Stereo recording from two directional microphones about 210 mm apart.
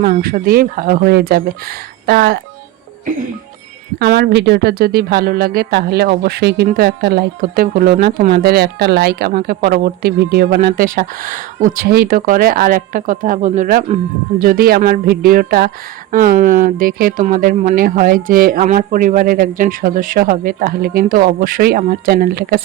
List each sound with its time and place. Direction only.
0.0 s speech: 45° right (ahead or behind)
4.0 s speech: 50° right (ahead or behind)